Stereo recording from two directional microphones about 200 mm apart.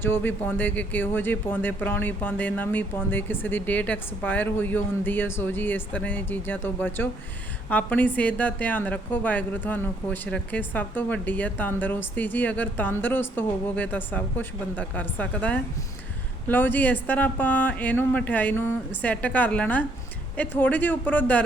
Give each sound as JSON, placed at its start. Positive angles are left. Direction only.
{"t": 0.0, "sound": "a woman's voice", "side_deg": 10}